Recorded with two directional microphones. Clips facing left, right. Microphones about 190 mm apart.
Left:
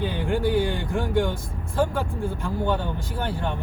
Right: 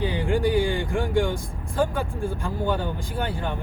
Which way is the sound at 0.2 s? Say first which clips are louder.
Right 1 dB; 15° right (ahead or behind).